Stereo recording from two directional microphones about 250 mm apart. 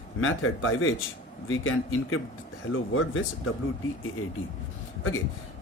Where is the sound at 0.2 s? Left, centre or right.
Left.